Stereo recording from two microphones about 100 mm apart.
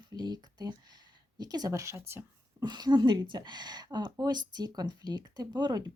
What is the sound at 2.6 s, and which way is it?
Speech, 45° right (ahead or behind).